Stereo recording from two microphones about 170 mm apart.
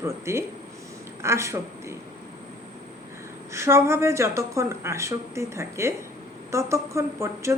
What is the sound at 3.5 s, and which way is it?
A woman's voice, 15° right (ahead or behind).